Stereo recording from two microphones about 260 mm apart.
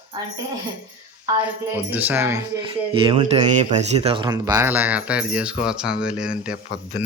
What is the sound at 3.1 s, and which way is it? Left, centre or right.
A man's voice, right.